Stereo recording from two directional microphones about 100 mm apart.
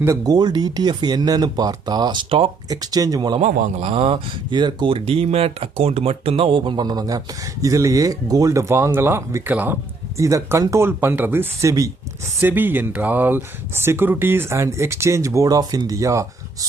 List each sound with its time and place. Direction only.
0.3 s speech: 45° right (ahead or behind)
3.4 s speech: 65° right (ahead or behind)
6.7 s speech: 40° right (ahead or behind); by 9.7 s 20° right (ahead or behind)
10.2 s speech: 30° right (ahead or behind)